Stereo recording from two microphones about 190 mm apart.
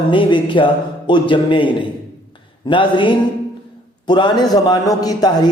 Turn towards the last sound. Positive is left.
turn(degrees=20)  # may be behind; listen again after turning